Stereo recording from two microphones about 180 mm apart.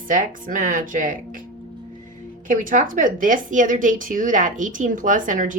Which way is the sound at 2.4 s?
50° right (ahead or behind).